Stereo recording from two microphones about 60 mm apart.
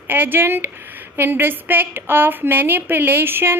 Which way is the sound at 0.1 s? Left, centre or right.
Right.